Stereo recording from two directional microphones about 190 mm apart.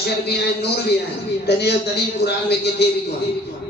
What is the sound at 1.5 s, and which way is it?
Speech, 60° left (ahead or behind).